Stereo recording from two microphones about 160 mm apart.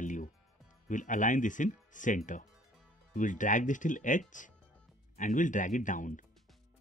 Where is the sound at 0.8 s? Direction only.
55° left (ahead or behind).